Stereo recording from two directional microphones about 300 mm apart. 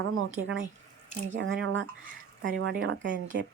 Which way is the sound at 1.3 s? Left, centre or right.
Right.